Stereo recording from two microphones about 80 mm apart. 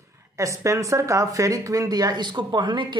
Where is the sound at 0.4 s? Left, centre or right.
Right.